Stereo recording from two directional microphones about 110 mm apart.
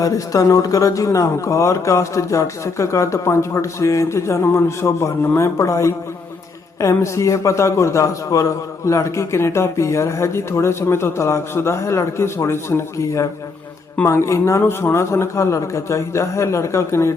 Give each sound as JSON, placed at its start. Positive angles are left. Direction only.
{"t": 0.0, "sound": "a man's voice", "side_deg": 30}